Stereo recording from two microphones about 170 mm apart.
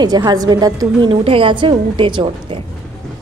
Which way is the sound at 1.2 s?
30° right (ahead or behind).